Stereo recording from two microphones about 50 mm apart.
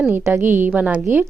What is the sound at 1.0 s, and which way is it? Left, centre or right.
Speech, right.